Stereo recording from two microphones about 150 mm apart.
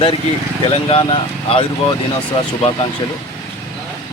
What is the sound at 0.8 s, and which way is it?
Speech, 35° left (ahead or behind).